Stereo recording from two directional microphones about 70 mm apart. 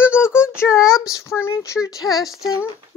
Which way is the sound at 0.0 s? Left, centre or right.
Left.